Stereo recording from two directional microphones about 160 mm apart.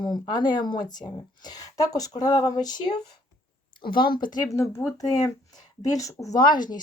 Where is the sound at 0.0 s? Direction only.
25° left (ahead or behind).